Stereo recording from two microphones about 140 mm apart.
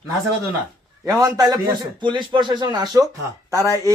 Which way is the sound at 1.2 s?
25° right (ahead or behind).